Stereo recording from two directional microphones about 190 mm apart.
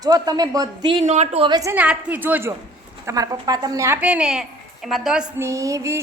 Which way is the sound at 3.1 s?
20° right (ahead or behind).